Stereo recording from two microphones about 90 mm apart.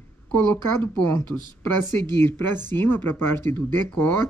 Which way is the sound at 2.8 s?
25° left (ahead or behind).